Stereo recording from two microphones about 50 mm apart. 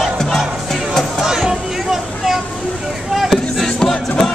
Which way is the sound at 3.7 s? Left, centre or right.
Centre.